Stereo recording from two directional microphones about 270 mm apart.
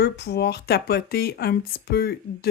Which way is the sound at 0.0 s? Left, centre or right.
Left.